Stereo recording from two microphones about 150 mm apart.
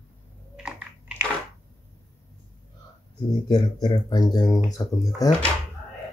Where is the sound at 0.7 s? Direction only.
10° right (ahead or behind).